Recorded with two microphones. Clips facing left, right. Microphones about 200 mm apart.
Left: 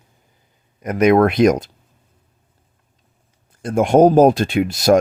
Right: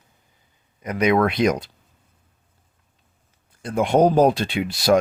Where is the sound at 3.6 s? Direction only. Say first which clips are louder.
Left 5 dB; 45° left (ahead or behind).